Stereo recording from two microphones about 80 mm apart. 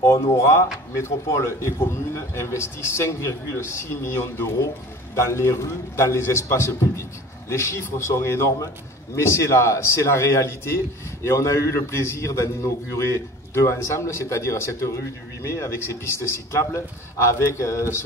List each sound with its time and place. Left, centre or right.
0.0 s speech: left